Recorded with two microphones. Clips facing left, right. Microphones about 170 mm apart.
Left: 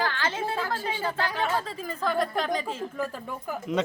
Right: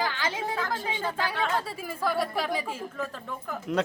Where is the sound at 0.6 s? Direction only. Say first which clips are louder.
Left 1 dB; 10° left (ahead or behind).